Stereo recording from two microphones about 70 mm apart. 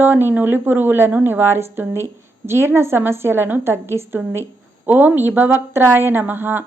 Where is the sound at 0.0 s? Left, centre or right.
Right.